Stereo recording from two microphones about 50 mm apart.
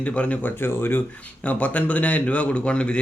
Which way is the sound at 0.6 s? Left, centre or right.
Left.